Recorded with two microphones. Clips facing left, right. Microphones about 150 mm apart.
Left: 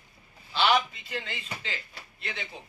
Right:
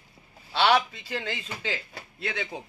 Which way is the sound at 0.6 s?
80° right.